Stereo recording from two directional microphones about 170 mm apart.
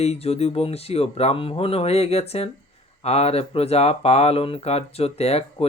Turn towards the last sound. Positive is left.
turn(degrees=35)  # may be behind; listen again after turning